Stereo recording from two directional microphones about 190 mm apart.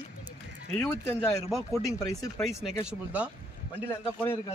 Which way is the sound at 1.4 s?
Centre (ahead or behind).